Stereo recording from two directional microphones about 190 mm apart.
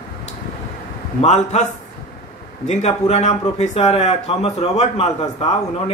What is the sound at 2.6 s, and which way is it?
Speech, 35° left (ahead or behind).